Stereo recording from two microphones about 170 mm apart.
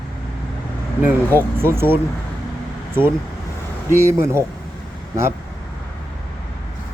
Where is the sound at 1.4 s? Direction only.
15° right (ahead or behind).